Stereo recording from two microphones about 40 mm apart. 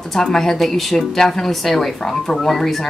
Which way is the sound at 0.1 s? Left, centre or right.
Centre.